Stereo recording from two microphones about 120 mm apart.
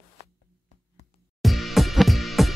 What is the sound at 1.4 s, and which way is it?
Music, centre (ahead or behind).